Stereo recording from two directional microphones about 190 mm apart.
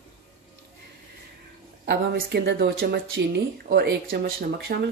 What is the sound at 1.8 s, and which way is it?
Speech, 60° right (ahead or behind).